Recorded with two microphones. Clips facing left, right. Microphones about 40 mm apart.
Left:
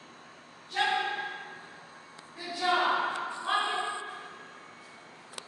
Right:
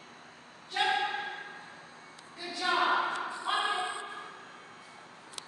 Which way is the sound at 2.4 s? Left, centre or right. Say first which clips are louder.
Left 2 dB; centre.